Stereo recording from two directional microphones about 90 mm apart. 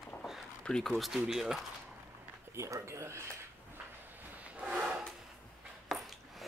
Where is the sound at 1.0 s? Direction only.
5° right (ahead or behind).